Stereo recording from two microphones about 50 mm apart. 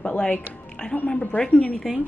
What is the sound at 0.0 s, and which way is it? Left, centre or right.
Speech, left.